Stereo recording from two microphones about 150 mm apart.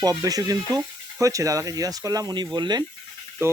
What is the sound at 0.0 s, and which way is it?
Speech, 25° right (ahead or behind).